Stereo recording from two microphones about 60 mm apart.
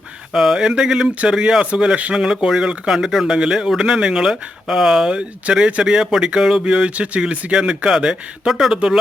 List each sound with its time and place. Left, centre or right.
0.3 s speech: centre
5.8 s speech: centre